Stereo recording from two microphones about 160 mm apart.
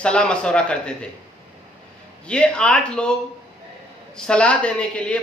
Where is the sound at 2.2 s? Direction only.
5° left (ahead or behind).